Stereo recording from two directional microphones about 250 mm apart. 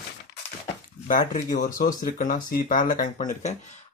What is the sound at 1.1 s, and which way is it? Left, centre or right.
Speech, left.